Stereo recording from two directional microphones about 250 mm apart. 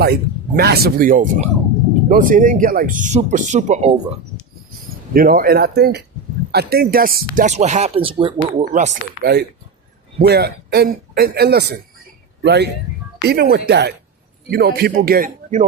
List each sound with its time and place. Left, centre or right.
0.0 s speech: right
5.1 s speech: right
9.2 s speech: right